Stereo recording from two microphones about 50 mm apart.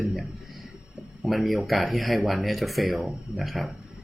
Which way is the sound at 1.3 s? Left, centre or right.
Centre.